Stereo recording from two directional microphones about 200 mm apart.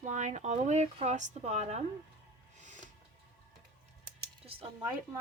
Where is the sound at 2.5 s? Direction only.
35° right (ahead or behind).